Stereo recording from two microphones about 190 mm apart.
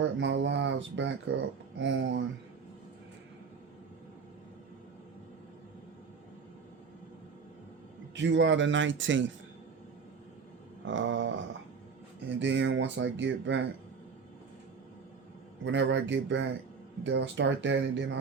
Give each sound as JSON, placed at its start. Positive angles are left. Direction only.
{"t": 0.0, "sound": "speech", "side_deg": -70}
{"t": 8.1, "sound": "speech", "side_deg": -70}
{"t": 10.8, "sound": "a sound", "side_deg": -85}
{"t": 12.4, "sound": "speech", "side_deg": -75}
{"t": 15.6, "sound": "speech", "side_deg": -70}